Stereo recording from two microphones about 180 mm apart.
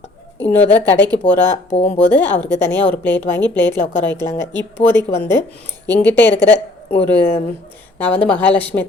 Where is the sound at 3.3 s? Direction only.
10° left (ahead or behind).